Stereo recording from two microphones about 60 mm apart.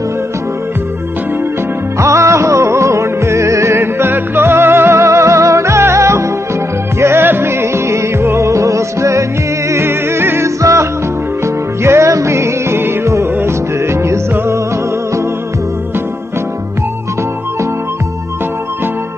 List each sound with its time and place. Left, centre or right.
2.0 s music: right
9.7 s music: right
10.6 s music: right